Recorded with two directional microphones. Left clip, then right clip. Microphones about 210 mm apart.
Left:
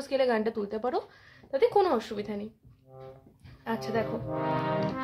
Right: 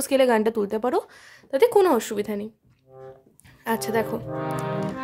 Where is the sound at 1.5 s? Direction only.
45° right (ahead or behind).